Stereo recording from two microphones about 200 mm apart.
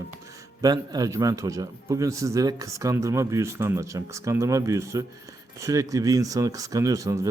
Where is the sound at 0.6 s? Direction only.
20° right (ahead or behind).